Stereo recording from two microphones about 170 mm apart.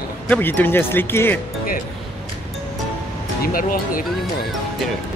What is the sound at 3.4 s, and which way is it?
Speech, 55° left (ahead or behind).